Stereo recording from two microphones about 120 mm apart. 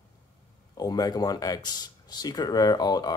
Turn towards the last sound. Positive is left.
turn(degrees=35)  # may be behind; listen again after turning